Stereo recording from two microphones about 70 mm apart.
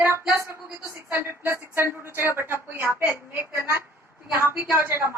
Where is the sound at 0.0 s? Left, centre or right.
Right.